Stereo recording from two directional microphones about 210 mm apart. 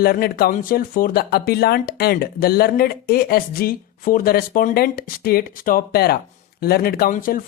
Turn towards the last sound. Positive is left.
turn(degrees=40)  # may be behind; listen again after turning